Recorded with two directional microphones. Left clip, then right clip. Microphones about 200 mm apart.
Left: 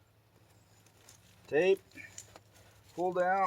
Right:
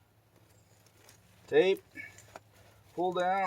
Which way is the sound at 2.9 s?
15° right (ahead or behind).